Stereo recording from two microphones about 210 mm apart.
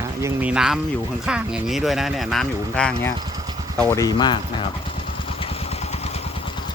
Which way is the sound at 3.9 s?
15° left (ahead or behind).